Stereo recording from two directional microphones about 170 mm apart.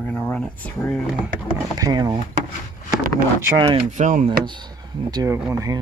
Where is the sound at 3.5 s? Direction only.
35° right (ahead or behind).